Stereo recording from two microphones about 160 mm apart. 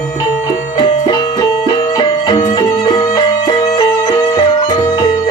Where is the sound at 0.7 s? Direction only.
30° left (ahead or behind).